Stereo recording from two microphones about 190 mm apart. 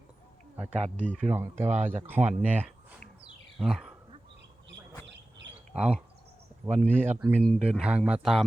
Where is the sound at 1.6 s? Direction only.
35° right (ahead or behind).